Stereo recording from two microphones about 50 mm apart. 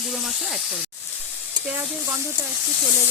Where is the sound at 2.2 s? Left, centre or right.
Right.